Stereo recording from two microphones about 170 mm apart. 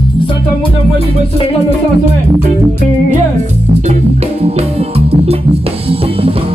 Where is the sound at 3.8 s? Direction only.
40° right (ahead or behind).